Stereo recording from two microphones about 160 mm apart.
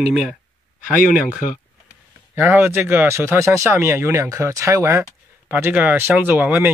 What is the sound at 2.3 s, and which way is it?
Speech, 10° right (ahead or behind).